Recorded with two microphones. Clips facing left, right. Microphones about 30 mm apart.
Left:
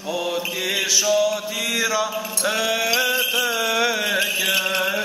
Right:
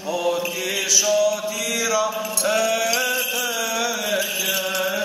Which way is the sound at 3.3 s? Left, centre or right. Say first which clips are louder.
Left 3 dB; left.